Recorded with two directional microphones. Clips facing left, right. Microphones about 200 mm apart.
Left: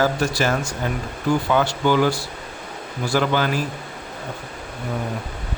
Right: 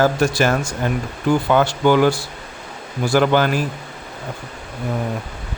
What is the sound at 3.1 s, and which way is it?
Speech, 55° right (ahead or behind).